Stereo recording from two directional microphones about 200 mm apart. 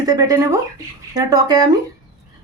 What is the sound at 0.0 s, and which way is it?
Speech, 20° right (ahead or behind).